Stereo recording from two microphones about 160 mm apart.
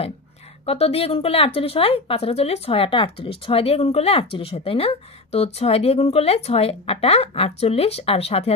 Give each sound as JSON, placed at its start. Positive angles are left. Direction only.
{"t": 0.7, "sound": "speech", "side_deg": 40}